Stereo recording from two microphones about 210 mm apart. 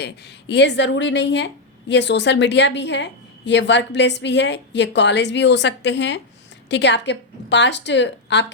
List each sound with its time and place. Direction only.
0.0 s a woman's voice: 55° left (ahead or behind)